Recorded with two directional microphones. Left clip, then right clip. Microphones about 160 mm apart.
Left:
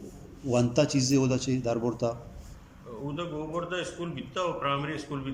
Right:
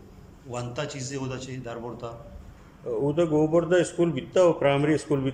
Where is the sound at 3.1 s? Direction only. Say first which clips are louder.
Right 11 dB; 45° right (ahead or behind).